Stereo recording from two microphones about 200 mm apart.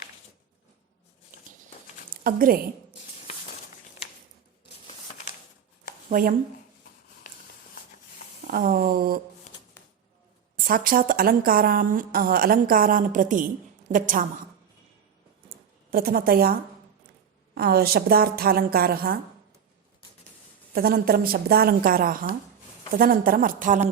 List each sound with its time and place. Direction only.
2.2 s a woman's voice: 45° right (ahead or behind)
6.1 s speech: 45° right (ahead or behind)
8.4 s a woman's voice: 45° right (ahead or behind)
10.7 s a woman's voice: 45° right (ahead or behind)
15.4 s a sound: 45° right (ahead or behind)
17.5 s a woman's voice: 50° right (ahead or behind)
20.7 s a woman's voice: 50° right (ahead or behind)